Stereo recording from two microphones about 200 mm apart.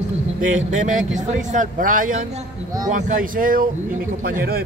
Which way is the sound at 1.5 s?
40° right (ahead or behind).